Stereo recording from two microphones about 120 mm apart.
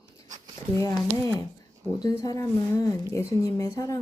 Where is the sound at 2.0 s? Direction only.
30° left (ahead or behind).